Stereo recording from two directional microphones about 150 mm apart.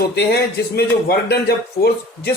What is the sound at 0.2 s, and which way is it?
A man's voice, 90° left.